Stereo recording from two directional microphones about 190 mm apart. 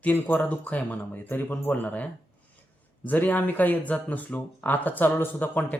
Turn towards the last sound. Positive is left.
turn(degrees=10)  # may be behind; listen again after turning